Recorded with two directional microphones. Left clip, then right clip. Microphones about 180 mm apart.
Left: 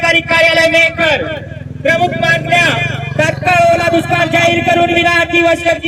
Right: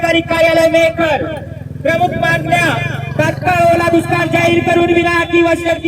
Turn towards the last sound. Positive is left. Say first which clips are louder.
# left 2 dB
turn(degrees=45)  # may be behind; listen again after turning